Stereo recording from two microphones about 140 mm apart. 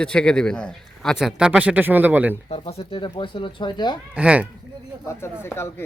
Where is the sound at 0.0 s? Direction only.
5° left (ahead or behind); by 2.4 s 10° right (ahead or behind).